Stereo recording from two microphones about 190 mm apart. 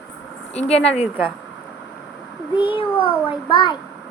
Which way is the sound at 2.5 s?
25° left (ahead or behind).